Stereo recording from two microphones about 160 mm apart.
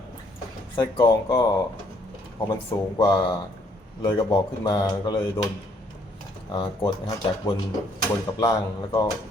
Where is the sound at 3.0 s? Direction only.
25° left (ahead or behind).